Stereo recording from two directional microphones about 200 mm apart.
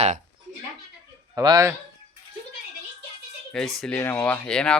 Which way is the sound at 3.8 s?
5° left (ahead or behind).